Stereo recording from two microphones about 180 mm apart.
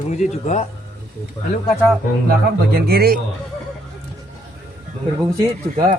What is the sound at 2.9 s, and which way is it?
Speech, 60° right (ahead or behind).